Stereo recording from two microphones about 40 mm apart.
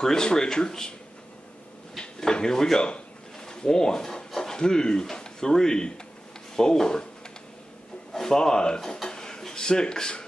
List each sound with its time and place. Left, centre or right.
0.0 s speech: centre
2.0 s speech: centre
2.8 s a sound: centre
6.5 s speech: centre
8.1 s speech: centre